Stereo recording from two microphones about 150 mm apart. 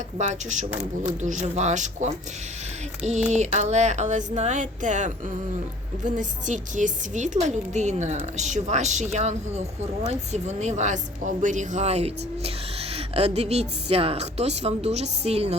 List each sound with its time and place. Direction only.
0.2 s a woman's voice: 55° right (ahead or behind)
10.1 s a woman's voice: 50° right (ahead or behind)